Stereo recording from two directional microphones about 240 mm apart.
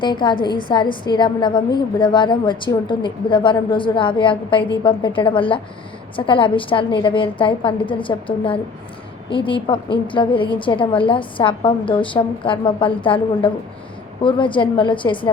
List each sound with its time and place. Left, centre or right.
0.0 s a woman's voice: centre